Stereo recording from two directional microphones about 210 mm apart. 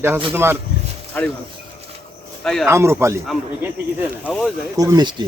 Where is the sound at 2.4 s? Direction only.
Centre (ahead or behind).